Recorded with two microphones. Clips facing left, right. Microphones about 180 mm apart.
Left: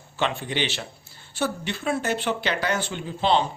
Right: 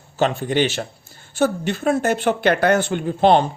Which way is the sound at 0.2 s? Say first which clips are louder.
Right 8 dB; 40° right (ahead or behind).